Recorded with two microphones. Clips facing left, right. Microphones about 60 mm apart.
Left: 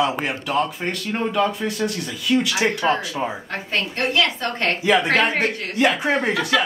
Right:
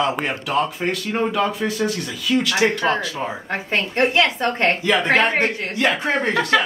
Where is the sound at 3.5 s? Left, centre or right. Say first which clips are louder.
Right 3 dB; right.